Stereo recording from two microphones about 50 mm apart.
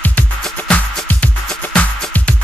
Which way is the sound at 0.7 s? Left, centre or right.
Left.